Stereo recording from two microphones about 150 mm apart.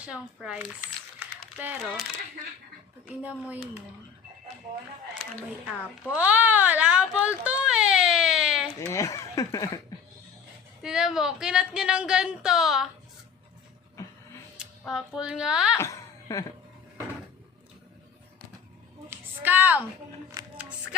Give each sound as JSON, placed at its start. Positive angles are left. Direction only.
{"t": 0.0, "sound": "speech", "side_deg": -5}
{"t": 3.1, "sound": "speech", "side_deg": -10}
{"t": 6.1, "sound": "baby cry", "side_deg": -10}
{"t": 8.8, "sound": "speech", "side_deg": 20}
{"t": 10.8, "sound": "a woman's voice", "side_deg": -5}
{"t": 14.6, "sound": "speech", "side_deg": -5}
{"t": 15.8, "sound": "a sound", "side_deg": 20}
{"t": 19.4, "sound": "speech", "side_deg": -10}